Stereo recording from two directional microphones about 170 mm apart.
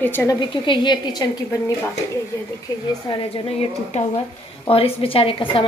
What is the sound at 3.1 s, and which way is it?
A woman's voice, 35° left (ahead or behind).